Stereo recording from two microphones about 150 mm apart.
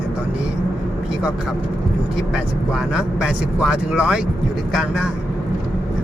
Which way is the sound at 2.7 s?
5° right (ahead or behind).